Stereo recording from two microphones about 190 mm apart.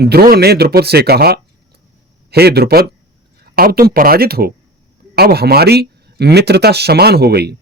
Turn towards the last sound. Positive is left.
turn(degrees=-60)  # may be behind; listen again after turning